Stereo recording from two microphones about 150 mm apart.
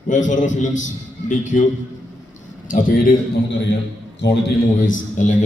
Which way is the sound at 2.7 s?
65° left (ahead or behind).